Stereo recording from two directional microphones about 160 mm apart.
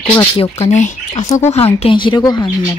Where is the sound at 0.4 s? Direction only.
40° left (ahead or behind).